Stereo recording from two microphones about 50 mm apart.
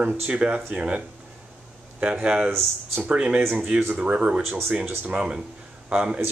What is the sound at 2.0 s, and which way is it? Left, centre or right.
Speech, right.